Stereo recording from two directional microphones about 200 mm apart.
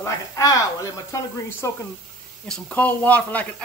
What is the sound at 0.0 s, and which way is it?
Speech, 15° left (ahead or behind).